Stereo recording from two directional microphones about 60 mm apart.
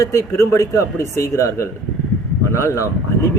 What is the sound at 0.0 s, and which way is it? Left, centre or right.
Speech, left.